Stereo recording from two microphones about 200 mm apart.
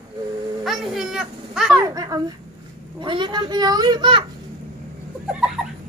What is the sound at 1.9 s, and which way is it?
A child's voice, 20° right (ahead or behind).